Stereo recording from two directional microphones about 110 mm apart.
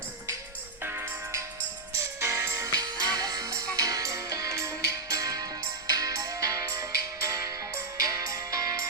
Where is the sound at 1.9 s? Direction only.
25° right (ahead or behind).